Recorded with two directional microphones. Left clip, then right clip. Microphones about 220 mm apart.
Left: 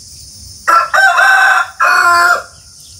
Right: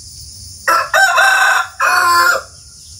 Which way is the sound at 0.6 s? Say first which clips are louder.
Left 3 dB; 35° right (ahead or behind).